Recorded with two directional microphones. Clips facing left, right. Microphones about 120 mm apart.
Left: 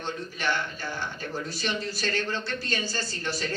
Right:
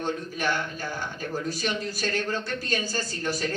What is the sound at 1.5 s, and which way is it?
Speech, 45° right (ahead or behind).